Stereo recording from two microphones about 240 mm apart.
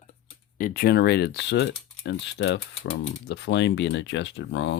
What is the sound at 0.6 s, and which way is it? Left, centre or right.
Speech, left.